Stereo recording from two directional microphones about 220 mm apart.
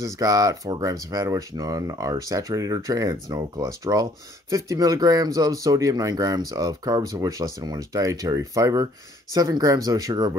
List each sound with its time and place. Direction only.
0.0 s speech: 15° right (ahead or behind)